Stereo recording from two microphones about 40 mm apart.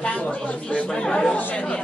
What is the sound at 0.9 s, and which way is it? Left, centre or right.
Speech, centre.